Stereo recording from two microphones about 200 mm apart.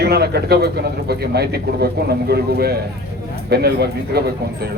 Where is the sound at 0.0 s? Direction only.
55° right (ahead or behind).